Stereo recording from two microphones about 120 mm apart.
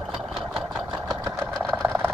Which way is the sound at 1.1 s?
25° right (ahead or behind).